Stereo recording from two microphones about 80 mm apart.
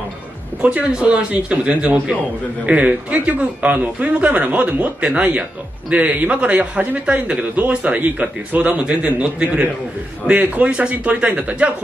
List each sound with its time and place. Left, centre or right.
0.6 s a man's voice: centre